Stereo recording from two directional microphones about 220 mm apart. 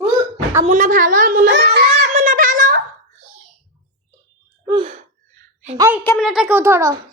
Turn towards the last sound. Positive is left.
turn(degrees=-10)  # may be behind; listen again after turning